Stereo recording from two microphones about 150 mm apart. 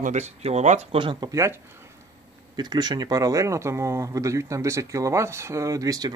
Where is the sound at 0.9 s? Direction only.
35° right (ahead or behind).